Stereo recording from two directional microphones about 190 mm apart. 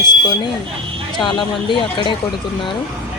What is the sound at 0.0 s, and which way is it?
Vehicle, 20° left (ahead or behind).